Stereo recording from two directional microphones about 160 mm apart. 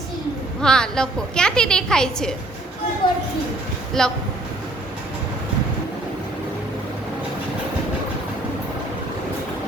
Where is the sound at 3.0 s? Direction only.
30° left (ahead or behind).